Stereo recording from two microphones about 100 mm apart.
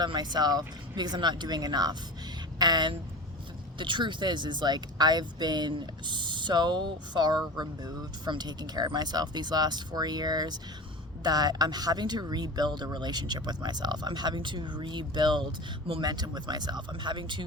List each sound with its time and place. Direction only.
0.0 s speech: 45° right (ahead or behind)